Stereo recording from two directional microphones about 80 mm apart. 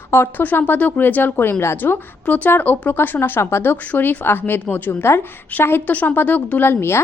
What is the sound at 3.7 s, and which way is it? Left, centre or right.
A woman's voice, left.